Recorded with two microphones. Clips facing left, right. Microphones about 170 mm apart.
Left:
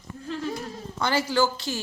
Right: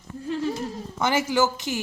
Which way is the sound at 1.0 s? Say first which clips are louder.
Right 1 dB; 20° right (ahead or behind).